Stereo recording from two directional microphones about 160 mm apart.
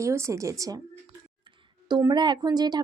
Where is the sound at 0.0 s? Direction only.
20° right (ahead or behind).